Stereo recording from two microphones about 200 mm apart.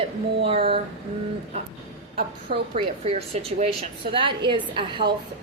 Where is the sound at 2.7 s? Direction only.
30° right (ahead or behind).